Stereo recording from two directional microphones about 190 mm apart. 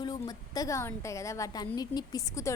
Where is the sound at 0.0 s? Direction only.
20° left (ahead or behind).